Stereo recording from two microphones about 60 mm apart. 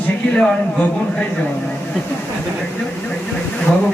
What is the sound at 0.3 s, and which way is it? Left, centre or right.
Speech, centre.